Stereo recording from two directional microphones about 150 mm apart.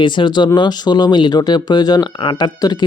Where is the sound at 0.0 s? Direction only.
30° left (ahead or behind).